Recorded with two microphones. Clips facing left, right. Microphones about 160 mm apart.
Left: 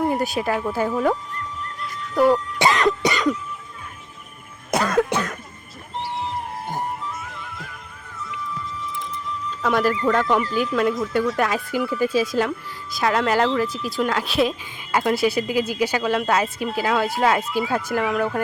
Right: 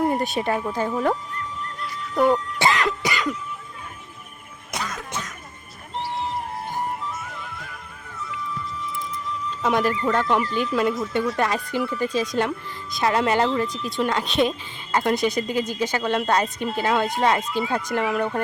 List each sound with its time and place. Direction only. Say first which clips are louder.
0.0 s speech: even; centre (ahead or behind)
1.8 s music: left 2 dB; centre (ahead or behind)
2.6 s cough: left 3 dB; 20° left (ahead or behind)
4.7 s cough: left 12 dB; 60° left (ahead or behind)
9.7 s speech: left 3 dB; centre (ahead or behind)